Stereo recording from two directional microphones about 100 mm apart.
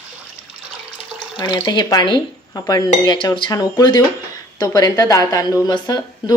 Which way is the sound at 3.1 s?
55° left (ahead or behind).